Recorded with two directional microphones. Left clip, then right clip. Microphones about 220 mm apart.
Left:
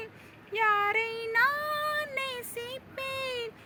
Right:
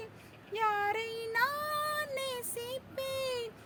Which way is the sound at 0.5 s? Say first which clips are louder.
Left 5 dB; 15° right (ahead or behind).